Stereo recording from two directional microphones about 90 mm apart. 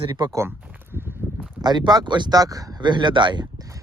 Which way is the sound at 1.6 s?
55° right (ahead or behind).